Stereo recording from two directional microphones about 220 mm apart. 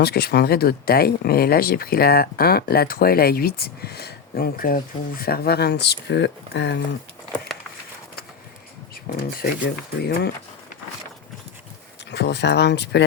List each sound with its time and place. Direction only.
0.0 s speech: 45° left (ahead or behind)
9.6 s speech: 45° left (ahead or behind)
12.1 s speech: 50° left (ahead or behind)